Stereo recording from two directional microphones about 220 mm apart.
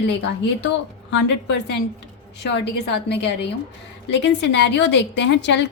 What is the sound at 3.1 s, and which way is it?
A woman's voice, 50° left (ahead or behind).